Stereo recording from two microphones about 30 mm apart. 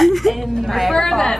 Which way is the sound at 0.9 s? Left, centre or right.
Centre.